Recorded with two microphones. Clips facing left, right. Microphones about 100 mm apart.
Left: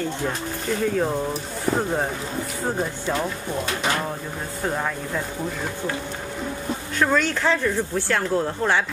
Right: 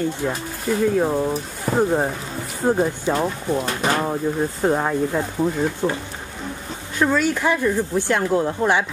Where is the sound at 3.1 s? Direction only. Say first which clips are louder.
Right 4 dB; 35° right (ahead or behind).